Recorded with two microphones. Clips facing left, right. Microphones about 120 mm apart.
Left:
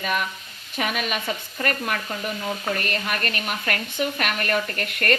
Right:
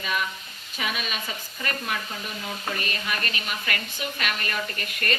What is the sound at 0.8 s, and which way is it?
A woman's voice, 60° left (ahead or behind).